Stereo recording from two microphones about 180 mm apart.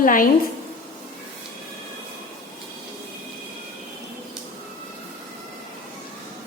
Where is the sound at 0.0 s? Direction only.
50° left (ahead or behind).